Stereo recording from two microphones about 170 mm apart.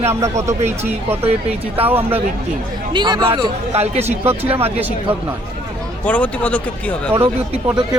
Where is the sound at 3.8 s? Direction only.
40° right (ahead or behind).